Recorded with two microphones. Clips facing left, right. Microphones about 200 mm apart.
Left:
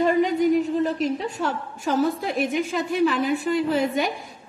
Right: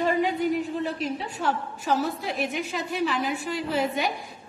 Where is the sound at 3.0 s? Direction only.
55° left (ahead or behind).